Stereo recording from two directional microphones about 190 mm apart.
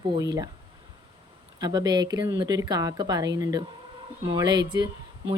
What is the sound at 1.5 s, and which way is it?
Speech, 20° right (ahead or behind).